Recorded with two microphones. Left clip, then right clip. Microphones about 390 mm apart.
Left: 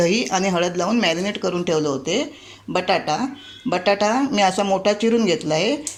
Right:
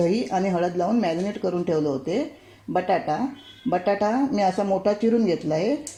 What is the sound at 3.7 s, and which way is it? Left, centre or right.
Speech, left.